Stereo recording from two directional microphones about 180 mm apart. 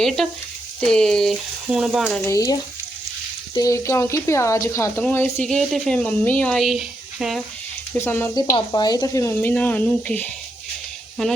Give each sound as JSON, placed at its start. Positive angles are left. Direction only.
{"t": 0.2, "sound": "speech", "side_deg": 0}
{"t": 2.2, "sound": "speech", "side_deg": 20}
{"t": 7.9, "sound": "speech", "side_deg": 15}
{"t": 8.4, "sound": "speech", "side_deg": 25}